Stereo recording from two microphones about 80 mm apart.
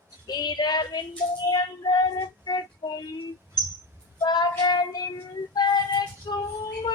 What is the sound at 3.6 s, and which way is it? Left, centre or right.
Bird, left.